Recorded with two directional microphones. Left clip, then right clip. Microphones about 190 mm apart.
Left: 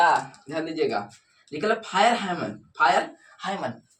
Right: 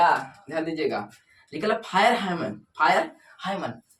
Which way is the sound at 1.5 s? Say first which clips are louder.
Even; 25° right (ahead or behind).